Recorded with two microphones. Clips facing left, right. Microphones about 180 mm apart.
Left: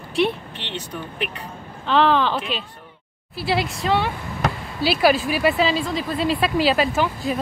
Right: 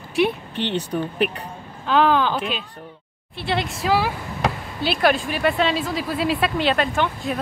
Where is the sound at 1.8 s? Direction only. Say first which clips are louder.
Even; 5° right (ahead or behind).